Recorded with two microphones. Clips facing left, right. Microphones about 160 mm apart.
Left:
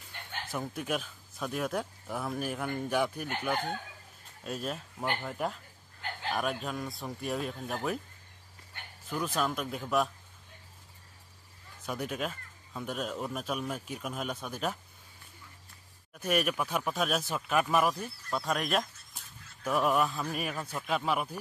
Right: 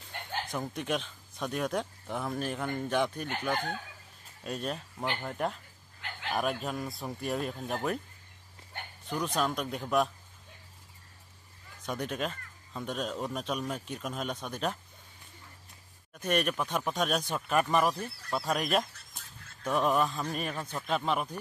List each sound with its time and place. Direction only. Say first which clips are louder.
0.5 s speech: even; 5° left (ahead or behind)
9.1 s speech: right 1 dB; centre (ahead or behind)
11.8 s speech: right 1 dB; 5° left (ahead or behind)
16.2 s speech: even; 5° left (ahead or behind)
17.9 s speech: right 1 dB; 65° right (ahead or behind)
18.3 s speech: right 1 dB; centre (ahead or behind)